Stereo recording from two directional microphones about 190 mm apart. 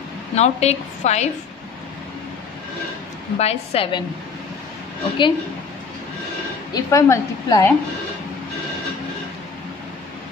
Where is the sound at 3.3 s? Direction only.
30° left (ahead or behind).